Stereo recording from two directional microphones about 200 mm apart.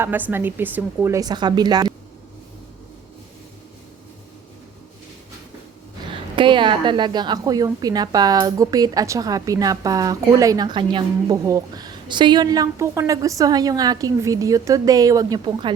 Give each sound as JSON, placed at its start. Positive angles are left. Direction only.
{"t": 0.0, "sound": "speech", "side_deg": -10}
{"t": 6.3, "sound": "a woman's voice", "side_deg": -25}